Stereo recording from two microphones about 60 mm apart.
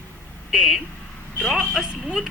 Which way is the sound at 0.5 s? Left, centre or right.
Centre.